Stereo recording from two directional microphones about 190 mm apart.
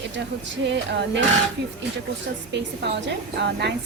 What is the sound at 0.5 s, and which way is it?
Speech, 70° right (ahead or behind).